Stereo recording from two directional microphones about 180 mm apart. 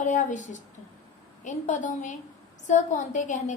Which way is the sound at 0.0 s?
45° left (ahead or behind).